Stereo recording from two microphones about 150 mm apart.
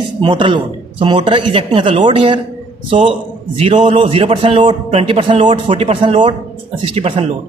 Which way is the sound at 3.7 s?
55° right (ahead or behind).